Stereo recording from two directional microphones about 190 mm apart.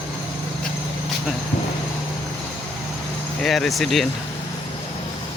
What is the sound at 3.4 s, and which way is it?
Speech, centre (ahead or behind).